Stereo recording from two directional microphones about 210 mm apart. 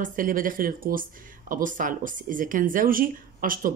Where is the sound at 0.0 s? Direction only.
40° right (ahead or behind).